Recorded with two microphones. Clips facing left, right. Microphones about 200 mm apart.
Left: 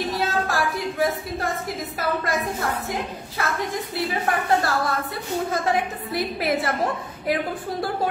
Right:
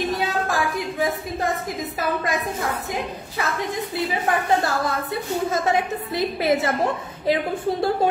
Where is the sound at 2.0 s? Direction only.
20° right (ahead or behind).